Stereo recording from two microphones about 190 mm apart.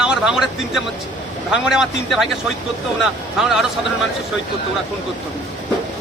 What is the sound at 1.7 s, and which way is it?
Speech, centre (ahead or behind).